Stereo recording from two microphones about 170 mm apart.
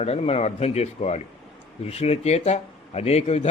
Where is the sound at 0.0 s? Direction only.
40° left (ahead or behind).